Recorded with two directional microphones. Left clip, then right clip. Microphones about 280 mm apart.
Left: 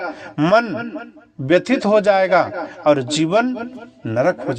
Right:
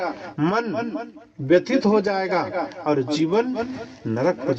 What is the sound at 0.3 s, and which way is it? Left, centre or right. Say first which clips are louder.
A man's voice: left 8 dB; left.